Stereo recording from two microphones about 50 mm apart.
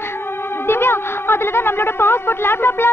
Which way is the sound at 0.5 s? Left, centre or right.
Left.